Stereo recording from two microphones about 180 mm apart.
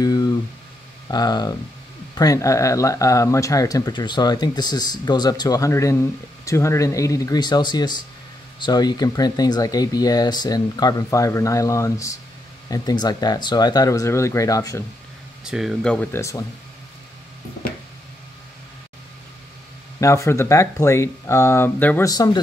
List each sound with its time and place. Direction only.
0.0 s a sound: 20° left (ahead or behind)
1.0 s speech: 20° left (ahead or behind)
15.4 s speech: 5° right (ahead or behind); by 16.4 s 15° left (ahead or behind)
20.0 s speech: 15° left (ahead or behind)